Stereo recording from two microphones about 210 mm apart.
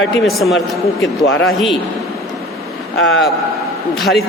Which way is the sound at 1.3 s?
70° left (ahead or behind).